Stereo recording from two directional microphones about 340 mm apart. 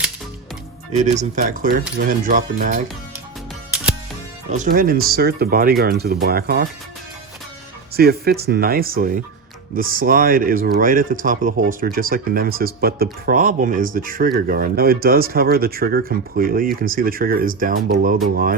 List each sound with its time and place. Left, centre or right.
0.9 s speech: right
4.4 s speech: right
7.9 s speech: right